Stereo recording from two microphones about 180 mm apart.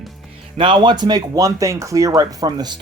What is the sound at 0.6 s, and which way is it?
Speech, 25° right (ahead or behind).